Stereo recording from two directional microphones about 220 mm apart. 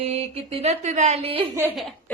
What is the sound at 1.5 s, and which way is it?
Speech, 10° right (ahead or behind).